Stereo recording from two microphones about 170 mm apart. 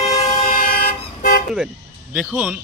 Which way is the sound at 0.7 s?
60° left (ahead or behind).